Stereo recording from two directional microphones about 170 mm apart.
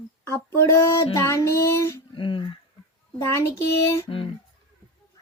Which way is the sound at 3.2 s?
15° left (ahead or behind).